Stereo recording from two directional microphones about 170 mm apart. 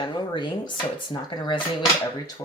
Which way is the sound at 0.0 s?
25° left (ahead or behind).